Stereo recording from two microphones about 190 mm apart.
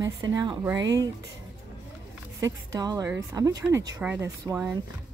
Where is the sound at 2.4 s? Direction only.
20° right (ahead or behind).